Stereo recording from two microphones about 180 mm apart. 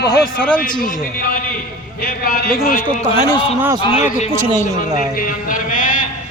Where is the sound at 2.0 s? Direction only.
55° left (ahead or behind).